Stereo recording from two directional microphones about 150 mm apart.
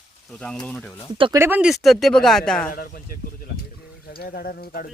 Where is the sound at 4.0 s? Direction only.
90° left.